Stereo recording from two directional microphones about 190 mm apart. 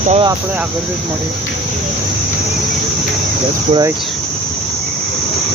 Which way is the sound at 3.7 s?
20° right (ahead or behind).